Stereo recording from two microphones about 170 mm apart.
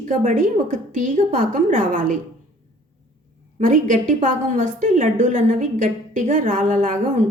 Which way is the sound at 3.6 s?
50° right (ahead or behind).